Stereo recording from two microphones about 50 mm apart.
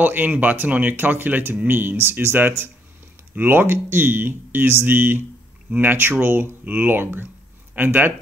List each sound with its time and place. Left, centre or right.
0.0 s speech: right